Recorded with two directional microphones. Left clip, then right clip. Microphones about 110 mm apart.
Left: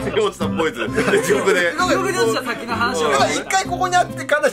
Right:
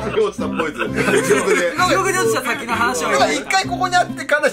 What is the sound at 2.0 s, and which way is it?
Speech, 10° right (ahead or behind).